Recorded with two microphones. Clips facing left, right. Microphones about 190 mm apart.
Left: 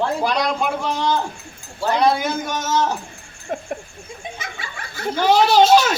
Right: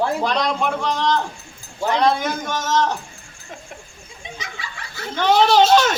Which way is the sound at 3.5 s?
55° left (ahead or behind).